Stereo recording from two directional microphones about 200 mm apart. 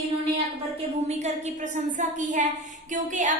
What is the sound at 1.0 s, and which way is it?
A woman's voice, 35° right (ahead or behind).